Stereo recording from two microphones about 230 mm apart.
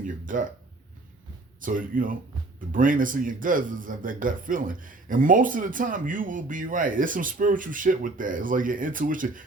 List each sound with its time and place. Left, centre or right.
0.0 s speech: right
1.6 s a man's voice: right